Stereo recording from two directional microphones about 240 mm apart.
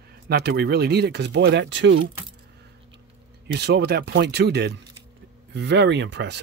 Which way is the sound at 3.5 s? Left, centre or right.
Right.